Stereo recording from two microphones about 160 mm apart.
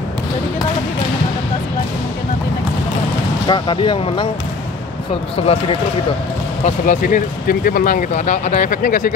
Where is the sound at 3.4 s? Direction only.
30° left (ahead or behind).